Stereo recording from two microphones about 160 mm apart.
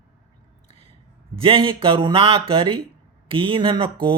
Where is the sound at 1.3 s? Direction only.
35° right (ahead or behind).